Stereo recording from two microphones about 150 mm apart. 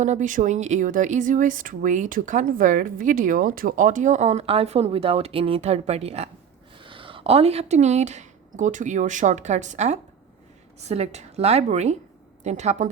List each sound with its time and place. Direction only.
0.0 s a woman's voice: 55° right (ahead or behind)